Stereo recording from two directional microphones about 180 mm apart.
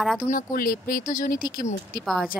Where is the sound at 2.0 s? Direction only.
Centre (ahead or behind).